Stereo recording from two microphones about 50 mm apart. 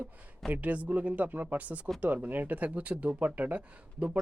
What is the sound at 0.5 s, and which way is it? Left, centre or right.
Speech, right.